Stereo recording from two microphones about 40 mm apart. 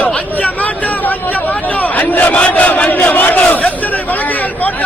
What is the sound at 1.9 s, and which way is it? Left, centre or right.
Crowd, left.